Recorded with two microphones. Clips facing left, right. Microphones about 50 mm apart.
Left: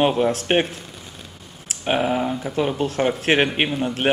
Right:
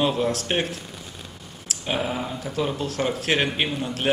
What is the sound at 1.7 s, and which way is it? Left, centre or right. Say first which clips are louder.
Speech: left 6 dB; left.